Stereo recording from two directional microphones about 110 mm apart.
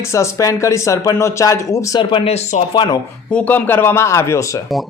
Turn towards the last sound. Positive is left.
turn(degrees=30)  # may be behind; listen again after turning